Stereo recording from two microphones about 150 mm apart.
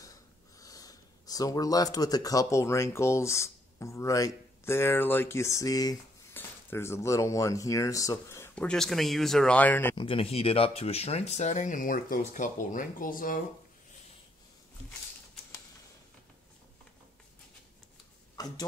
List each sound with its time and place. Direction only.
0.0 s speech: 25° left (ahead or behind)
8.6 s speech: 5° left (ahead or behind)
9.9 s speech: 40° left (ahead or behind); by 13.4 s 65° left (ahead or behind)
18.3 s speech: 25° left (ahead or behind)